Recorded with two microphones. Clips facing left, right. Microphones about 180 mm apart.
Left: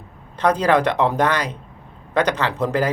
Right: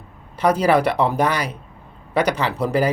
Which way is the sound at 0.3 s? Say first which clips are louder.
Right 1 dB; 10° right (ahead or behind).